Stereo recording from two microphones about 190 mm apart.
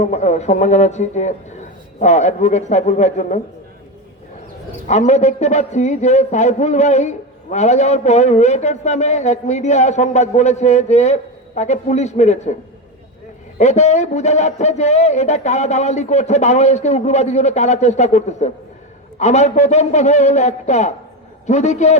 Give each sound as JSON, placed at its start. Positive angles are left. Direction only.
{"t": 0.0, "sound": "a man's voice", "side_deg": 40}
{"t": 4.9, "sound": "a man's voice", "side_deg": 35}
{"t": 13.6, "sound": "a man's voice", "side_deg": 35}